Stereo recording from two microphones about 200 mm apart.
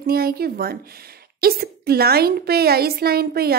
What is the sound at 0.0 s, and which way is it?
A woman's voice, 50° right (ahead or behind).